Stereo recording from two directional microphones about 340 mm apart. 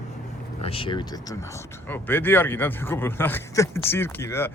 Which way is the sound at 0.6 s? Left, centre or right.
Centre.